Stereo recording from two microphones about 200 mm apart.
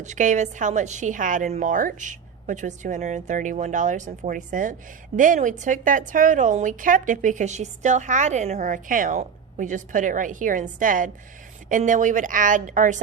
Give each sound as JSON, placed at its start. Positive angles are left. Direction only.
{"t": 0.0, "sound": "a woman's voice", "side_deg": -40}